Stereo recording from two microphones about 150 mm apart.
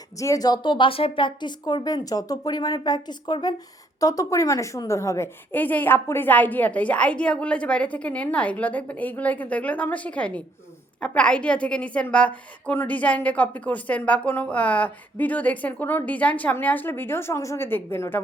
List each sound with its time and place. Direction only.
0.2 s a woman's voice: 25° left (ahead or behind)